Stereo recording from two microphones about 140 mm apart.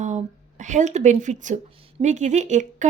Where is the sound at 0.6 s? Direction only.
60° right (ahead or behind).